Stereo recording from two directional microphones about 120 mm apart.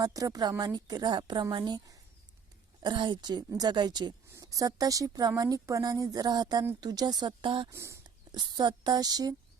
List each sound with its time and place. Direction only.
0.0 s speech: 30° right (ahead or behind)
7.7 s speech: 25° right (ahead or behind)
8.3 s speech: 40° right (ahead or behind)